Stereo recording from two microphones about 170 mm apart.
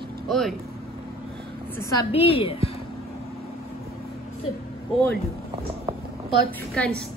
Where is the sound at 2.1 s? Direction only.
35° left (ahead or behind).